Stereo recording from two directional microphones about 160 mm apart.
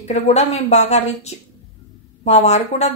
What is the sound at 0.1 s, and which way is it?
Speech, 45° left (ahead or behind).